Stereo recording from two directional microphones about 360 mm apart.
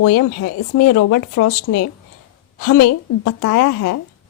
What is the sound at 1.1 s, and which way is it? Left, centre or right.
Speech, left.